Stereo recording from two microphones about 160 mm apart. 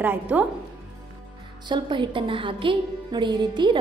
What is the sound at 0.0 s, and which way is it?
Speech, 10° right (ahead or behind).